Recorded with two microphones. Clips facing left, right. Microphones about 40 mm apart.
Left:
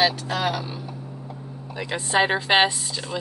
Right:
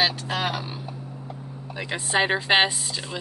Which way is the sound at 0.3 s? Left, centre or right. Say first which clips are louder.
Left 2 dB; centre.